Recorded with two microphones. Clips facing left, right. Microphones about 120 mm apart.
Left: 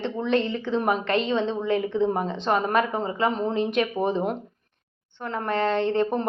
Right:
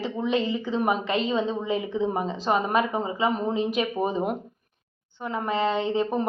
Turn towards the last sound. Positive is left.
turn(degrees=-5)  # may be behind; listen again after turning